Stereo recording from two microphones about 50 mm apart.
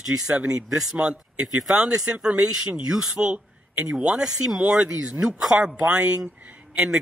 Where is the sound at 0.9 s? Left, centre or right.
Right.